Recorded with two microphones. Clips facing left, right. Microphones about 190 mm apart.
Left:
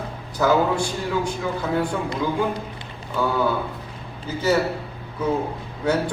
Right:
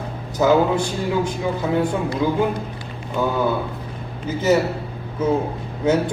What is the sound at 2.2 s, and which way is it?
A man's voice, 15° right (ahead or behind).